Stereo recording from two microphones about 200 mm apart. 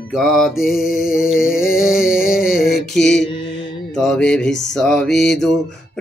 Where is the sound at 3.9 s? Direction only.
5° left (ahead or behind).